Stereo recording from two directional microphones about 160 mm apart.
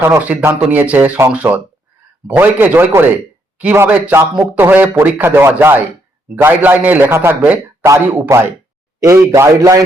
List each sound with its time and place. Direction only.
0.0 s a man's voice: 10° right (ahead or behind)